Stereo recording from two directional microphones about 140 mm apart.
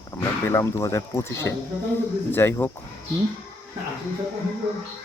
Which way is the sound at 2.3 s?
15° left (ahead or behind).